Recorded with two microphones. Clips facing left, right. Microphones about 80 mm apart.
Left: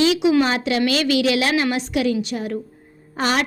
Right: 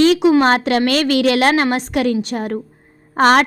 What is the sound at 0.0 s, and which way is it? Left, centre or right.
A woman's voice, right.